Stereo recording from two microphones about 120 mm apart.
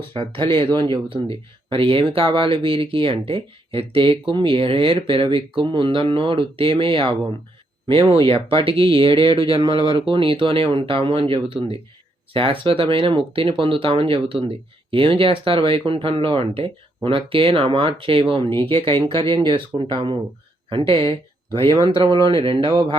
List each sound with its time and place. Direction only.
0.1 s speech: 45° right (ahead or behind)